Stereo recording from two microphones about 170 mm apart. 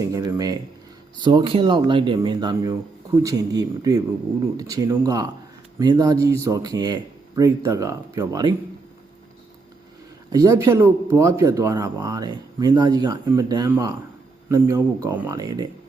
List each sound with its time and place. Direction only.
0.0 s a sound: 20° right (ahead or behind)
1.2 s speech: 25° right (ahead or behind)
10.3 s speech: 20° right (ahead or behind)